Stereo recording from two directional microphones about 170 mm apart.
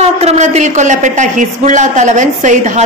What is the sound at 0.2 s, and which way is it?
A woman's voice, 40° right (ahead or behind).